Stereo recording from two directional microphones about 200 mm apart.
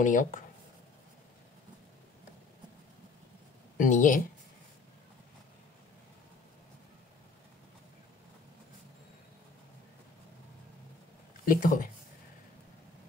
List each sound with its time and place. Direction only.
0.0 s speech: 40° left (ahead or behind)
3.7 s speech: 40° left (ahead or behind)
11.4 s speech: 45° left (ahead or behind)